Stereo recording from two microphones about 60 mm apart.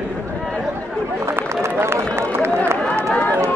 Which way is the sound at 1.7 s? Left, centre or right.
Right.